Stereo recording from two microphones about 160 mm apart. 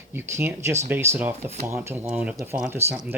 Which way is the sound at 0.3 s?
15° right (ahead or behind).